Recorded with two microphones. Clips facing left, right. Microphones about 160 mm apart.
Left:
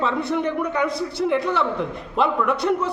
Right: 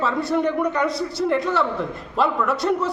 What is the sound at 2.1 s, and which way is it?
Speech, 20° left (ahead or behind).